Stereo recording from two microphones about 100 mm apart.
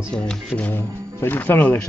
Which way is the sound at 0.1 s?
5° left (ahead or behind).